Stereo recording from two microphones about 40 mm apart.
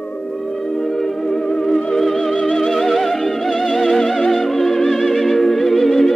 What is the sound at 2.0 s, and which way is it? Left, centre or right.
Music, centre.